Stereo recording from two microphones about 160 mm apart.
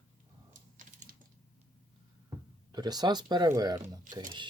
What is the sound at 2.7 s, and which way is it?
Speech, 25° right (ahead or behind).